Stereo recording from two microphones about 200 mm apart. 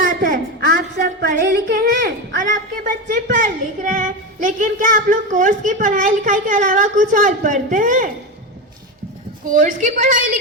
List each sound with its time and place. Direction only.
0.1 s speech: 40° right (ahead or behind)
2.4 s speech: 40° right (ahead or behind)
9.5 s speech: 40° right (ahead or behind)